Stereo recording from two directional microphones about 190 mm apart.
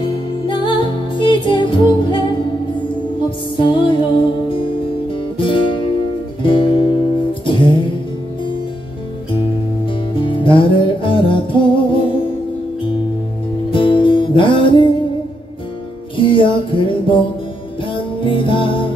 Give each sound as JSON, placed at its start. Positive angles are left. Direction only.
{"t": 0.5, "sound": "music", "side_deg": 25}
{"t": 3.3, "sound": "music", "side_deg": 25}
{"t": 10.1, "sound": "music", "side_deg": 25}
{"t": 13.7, "sound": "music", "side_deg": 25}
{"t": 16.2, "sound": "music", "side_deg": 25}